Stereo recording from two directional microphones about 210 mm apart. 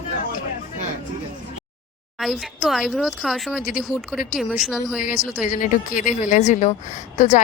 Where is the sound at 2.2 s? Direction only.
Centre (ahead or behind).